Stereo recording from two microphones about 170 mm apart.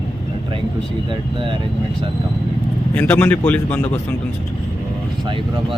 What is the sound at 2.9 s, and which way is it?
Speech, 10° left (ahead or behind).